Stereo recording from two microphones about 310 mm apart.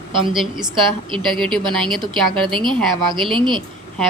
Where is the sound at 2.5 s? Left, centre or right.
Centre.